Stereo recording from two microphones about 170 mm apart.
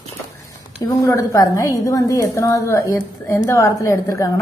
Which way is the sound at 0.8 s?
20° left (ahead or behind).